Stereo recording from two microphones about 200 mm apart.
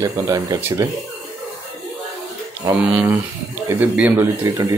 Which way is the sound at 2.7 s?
5° right (ahead or behind).